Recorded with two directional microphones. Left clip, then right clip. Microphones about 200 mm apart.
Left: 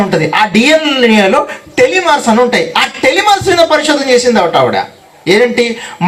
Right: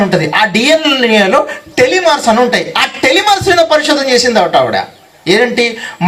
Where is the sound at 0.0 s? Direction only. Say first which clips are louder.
Even; 40° right (ahead or behind).